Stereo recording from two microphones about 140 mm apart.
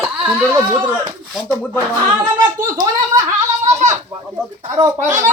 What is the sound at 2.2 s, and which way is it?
Speech, 30° right (ahead or behind).